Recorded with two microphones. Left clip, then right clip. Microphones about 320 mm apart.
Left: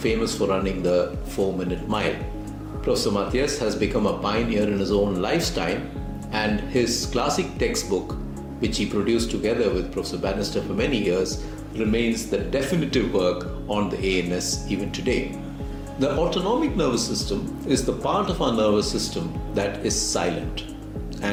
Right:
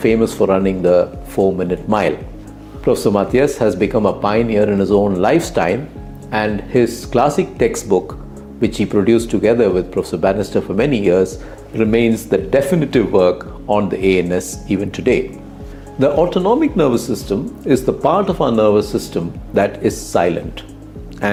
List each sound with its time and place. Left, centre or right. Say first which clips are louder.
0.0 s speech: right 9 dB; right